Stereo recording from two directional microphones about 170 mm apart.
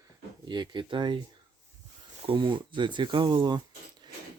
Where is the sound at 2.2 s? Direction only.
30° right (ahead or behind).